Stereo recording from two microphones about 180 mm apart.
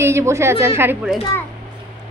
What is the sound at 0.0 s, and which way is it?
A woman's voice, 15° right (ahead or behind).